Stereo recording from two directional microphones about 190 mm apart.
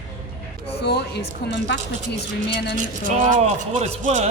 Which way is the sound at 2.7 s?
45° right (ahead or behind).